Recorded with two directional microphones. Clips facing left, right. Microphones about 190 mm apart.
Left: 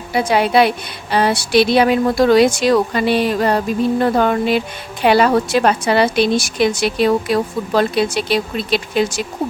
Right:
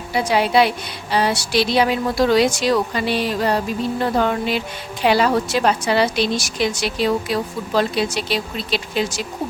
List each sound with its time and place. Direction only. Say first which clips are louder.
0.1 s a woman's voice: left 3 dB; 55° left (ahead or behind)
4.0 s a sound: left 1 dB; 55° left (ahead or behind)
5.0 s a woman's voice: left 4 dB; 60° left (ahead or behind)